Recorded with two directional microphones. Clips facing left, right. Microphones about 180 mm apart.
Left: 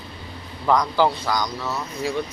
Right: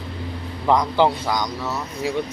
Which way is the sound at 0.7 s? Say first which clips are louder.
Right 1 dB; 20° right (ahead or behind).